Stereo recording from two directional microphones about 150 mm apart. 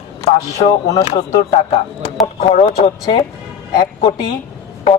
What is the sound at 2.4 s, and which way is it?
Speech, 40° left (ahead or behind).